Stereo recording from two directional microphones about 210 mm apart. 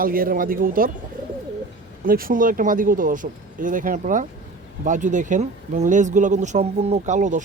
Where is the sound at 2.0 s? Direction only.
40° right (ahead or behind).